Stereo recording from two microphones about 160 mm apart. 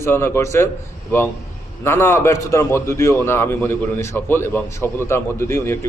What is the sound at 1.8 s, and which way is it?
A man's voice, 15° left (ahead or behind).